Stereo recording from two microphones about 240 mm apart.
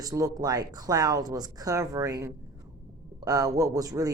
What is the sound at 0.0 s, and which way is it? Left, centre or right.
A man's voice, centre.